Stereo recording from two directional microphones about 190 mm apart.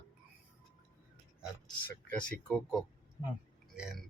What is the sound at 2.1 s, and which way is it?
Speech, 5° left (ahead or behind).